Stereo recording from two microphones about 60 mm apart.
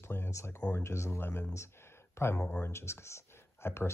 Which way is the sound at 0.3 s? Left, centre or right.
Left.